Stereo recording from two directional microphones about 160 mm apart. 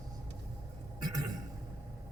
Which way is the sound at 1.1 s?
25° right (ahead or behind).